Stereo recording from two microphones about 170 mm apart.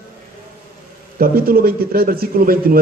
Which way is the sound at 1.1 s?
60° right (ahead or behind).